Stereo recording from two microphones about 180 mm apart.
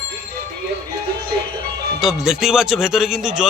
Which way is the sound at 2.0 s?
5° right (ahead or behind).